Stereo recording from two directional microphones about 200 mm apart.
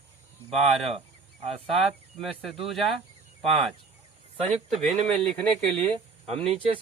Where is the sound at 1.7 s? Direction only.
Centre (ahead or behind).